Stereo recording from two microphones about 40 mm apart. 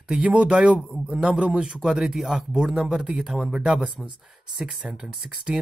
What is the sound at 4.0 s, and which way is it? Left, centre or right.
Speech, centre.